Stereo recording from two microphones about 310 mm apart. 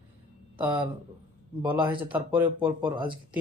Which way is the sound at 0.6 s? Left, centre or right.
Centre.